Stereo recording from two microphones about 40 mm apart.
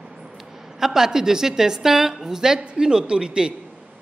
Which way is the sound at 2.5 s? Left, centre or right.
Right.